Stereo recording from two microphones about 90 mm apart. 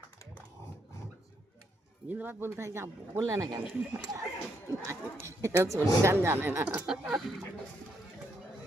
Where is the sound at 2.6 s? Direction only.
30° right (ahead or behind).